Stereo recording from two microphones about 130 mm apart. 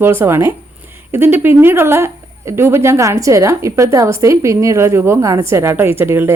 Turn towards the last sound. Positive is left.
turn(degrees=-20)  # may be behind; listen again after turning